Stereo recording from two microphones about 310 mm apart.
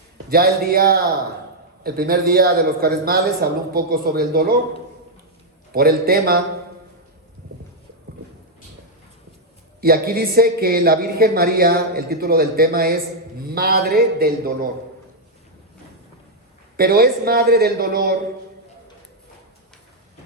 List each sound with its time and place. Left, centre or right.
0.3 s speech: right
5.7 s speech: right
9.8 s speech: right
16.7 s speech: right